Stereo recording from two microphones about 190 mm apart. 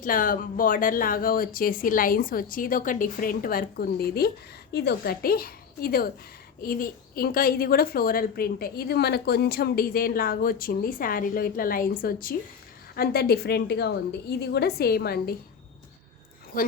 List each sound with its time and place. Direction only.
0.0 s a woman's voice: 45° left (ahead or behind)
16.5 s speech: 45° left (ahead or behind)